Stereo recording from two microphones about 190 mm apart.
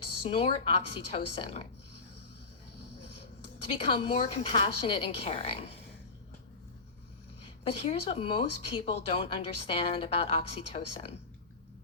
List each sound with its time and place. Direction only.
0.2 s speech: 30° left (ahead or behind)
3.2 s speech: 30° left (ahead or behind)
7.4 s speech: 30° left (ahead or behind)